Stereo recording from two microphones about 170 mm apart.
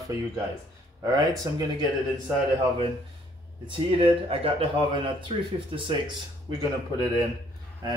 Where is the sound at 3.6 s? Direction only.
30° right (ahead or behind).